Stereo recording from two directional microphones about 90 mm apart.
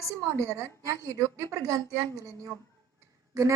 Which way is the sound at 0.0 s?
35° right (ahead or behind).